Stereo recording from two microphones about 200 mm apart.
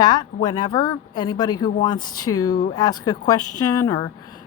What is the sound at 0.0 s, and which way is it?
A woman's voice, 20° left (ahead or behind).